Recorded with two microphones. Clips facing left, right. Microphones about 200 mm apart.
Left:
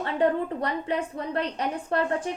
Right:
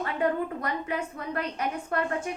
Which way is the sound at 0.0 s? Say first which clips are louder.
Left 3 dB; 30° left (ahead or behind).